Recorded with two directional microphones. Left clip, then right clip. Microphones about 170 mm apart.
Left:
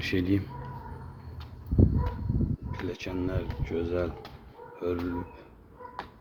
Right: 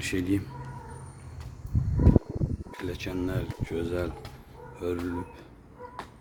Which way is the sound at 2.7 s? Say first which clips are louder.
Right 3 dB; 15° right (ahead or behind).